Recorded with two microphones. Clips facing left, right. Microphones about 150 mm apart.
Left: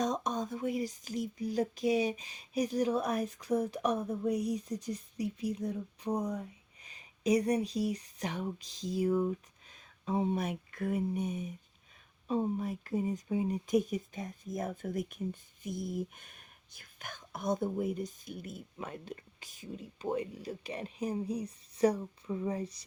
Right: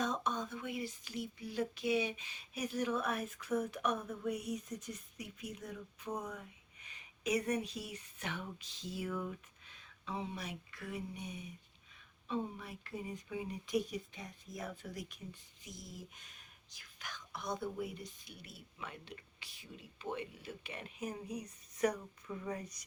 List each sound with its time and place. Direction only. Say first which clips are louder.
0.0 s speech: left 4 dB; 40° left (ahead or behind)